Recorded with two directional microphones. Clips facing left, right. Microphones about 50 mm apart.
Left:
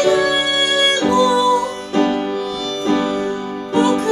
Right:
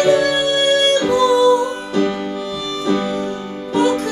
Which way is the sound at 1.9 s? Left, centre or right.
Left.